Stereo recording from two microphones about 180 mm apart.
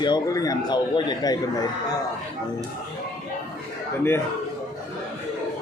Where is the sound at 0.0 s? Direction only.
20° left (ahead or behind).